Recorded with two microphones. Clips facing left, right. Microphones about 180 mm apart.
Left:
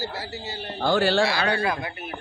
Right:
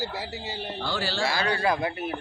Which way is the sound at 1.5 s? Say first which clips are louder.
Right 1 dB; 35° right (ahead or behind).